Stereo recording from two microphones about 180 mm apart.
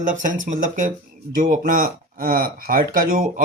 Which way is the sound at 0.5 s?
45° right (ahead or behind).